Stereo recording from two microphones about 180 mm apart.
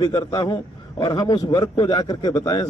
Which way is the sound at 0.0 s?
20° left (ahead or behind).